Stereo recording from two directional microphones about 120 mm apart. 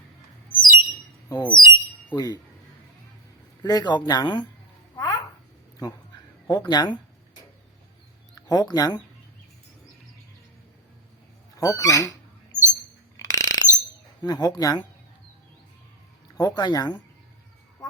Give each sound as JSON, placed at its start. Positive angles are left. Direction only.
{"t": 0.6, "sound": "bird", "side_deg": 40}
{"t": 1.3, "sound": "speech", "side_deg": 40}
{"t": 3.6, "sound": "speech", "side_deg": 35}
{"t": 4.9, "sound": "a sound", "side_deg": 35}
{"t": 6.7, "sound": "speech", "side_deg": 40}
{"t": 8.4, "sound": "speech", "side_deg": 35}
{"t": 11.5, "sound": "speech", "side_deg": 30}
{"t": 13.1, "sound": "a sound", "side_deg": 30}
{"t": 14.2, "sound": "speech", "side_deg": 35}
{"t": 16.4, "sound": "speech", "side_deg": 35}